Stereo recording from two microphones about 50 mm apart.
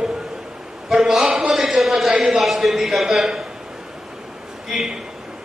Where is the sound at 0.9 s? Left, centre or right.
Centre.